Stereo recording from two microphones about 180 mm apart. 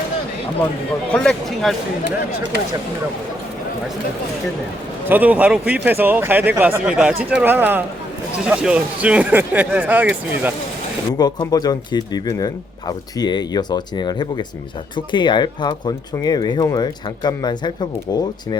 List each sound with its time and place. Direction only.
1.1 s speech: 5° left (ahead or behind)
5.0 s speech: 10° right (ahead or behind)
11.2 s speech: 20° left (ahead or behind)